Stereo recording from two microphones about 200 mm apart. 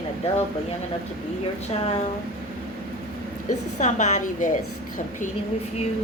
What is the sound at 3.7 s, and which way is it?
Speech, 35° left (ahead or behind).